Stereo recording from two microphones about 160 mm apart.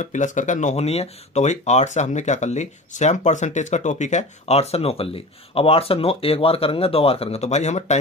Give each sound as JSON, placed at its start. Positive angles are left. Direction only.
{"t": 0.0, "sound": "speech", "side_deg": 50}